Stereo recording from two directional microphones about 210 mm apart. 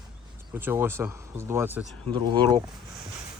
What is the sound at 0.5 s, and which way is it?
Speech, 10° right (ahead or behind).